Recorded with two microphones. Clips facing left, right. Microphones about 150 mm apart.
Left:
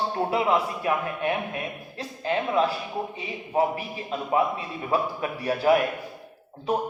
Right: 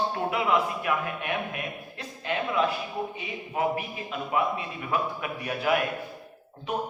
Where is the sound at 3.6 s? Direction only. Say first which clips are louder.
Left 3 dB; 30° left (ahead or behind).